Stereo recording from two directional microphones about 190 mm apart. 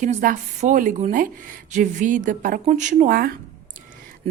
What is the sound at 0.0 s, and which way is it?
Speech, 40° right (ahead or behind).